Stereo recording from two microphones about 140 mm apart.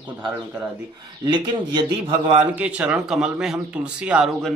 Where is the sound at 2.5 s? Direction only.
10° right (ahead or behind).